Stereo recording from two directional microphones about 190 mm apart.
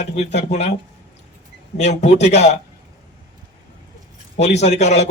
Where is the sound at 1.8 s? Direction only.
35° left (ahead or behind).